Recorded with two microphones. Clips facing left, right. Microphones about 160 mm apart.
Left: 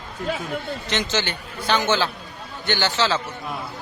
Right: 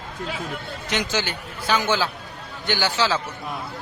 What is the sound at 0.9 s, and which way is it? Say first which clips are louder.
A man's voice: even; 10° right (ahead or behind).